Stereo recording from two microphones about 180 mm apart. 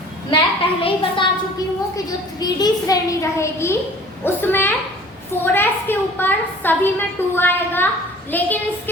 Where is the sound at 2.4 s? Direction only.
20° left (ahead or behind).